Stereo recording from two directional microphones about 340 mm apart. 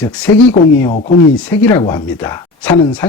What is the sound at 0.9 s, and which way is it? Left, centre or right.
Speech, left.